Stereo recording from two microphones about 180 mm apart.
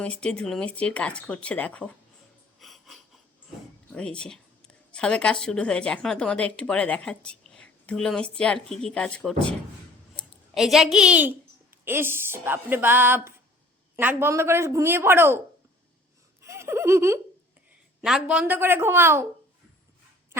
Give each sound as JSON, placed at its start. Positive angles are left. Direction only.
{"t": 0.0, "sound": "speech", "side_deg": 5}
{"t": 2.6, "sound": "wheeze", "side_deg": 0}
{"t": 3.9, "sound": "a woman's voice", "side_deg": 5}
{"t": 16.4, "sound": "giggle", "side_deg": -15}
{"t": 18.0, "sound": "a woman's voice", "side_deg": -5}